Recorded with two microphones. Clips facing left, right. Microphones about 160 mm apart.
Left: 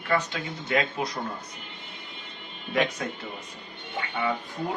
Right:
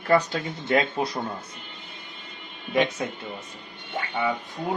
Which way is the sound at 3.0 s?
20° right (ahead or behind).